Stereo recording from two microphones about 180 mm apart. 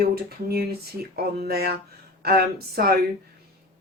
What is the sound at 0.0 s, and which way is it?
Speech, 60° right (ahead or behind).